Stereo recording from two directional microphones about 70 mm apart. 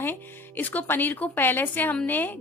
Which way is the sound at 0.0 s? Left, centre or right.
Left.